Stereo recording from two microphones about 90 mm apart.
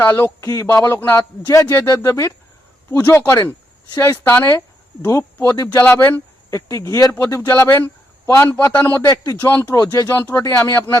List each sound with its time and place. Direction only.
0.0 s a man's voice: 25° left (ahead or behind)
1.0 s a man's voice: 20° left (ahead or behind)
1.5 s a man's voice: 40° left (ahead or behind)
5.8 s a man's voice: 20° left (ahead or behind)
6.5 s a man's voice: 35° left (ahead or behind)
9.0 s speech: 40° left (ahead or behind)
9.4 s a man's voice: 25° left (ahead or behind)
9.7 s speech: 40° left (ahead or behind)
10.7 s a man's voice: 25° left (ahead or behind)